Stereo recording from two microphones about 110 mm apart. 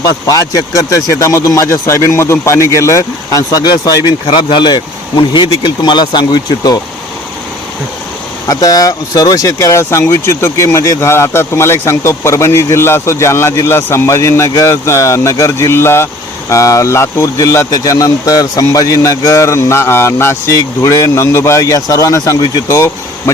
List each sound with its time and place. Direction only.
0.3 s speech: 35° left (ahead or behind)
8.4 s speech: 35° left (ahead or behind)